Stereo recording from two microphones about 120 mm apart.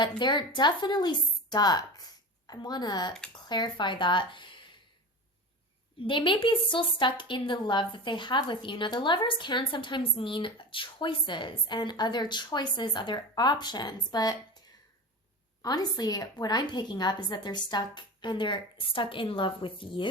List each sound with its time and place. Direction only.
0.2 s speech: 40° left (ahead or behind)
6.0 s a woman's voice: 45° left (ahead or behind)
15.6 s a woman's voice: 35° left (ahead or behind)